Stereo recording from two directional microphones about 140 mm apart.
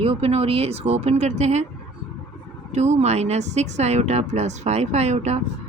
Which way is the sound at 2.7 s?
55° right (ahead or behind).